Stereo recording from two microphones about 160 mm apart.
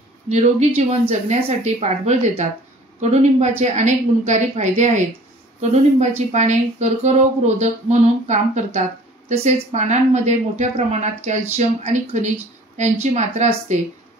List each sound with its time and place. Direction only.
0.3 s speech: 45° right (ahead or behind)